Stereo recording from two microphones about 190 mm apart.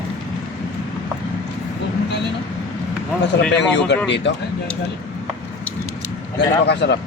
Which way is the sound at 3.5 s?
65° left (ahead or behind).